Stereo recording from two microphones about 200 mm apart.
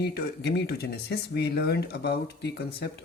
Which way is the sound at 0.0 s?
55° left (ahead or behind).